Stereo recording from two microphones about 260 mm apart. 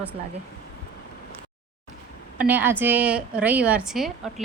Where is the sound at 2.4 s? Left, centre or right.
Centre.